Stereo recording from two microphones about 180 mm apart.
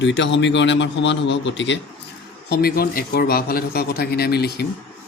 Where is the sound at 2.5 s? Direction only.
60° left (ahead or behind).